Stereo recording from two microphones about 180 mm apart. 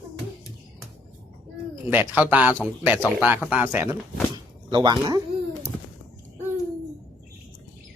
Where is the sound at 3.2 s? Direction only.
10° right (ahead or behind).